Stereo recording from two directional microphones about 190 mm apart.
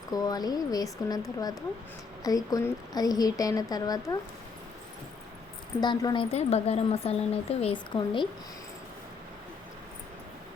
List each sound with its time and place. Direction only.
0.1 s speech: 20° left (ahead or behind)
5.8 s speech: 20° left (ahead or behind)
6.3 s a woman's voice: 35° left (ahead or behind)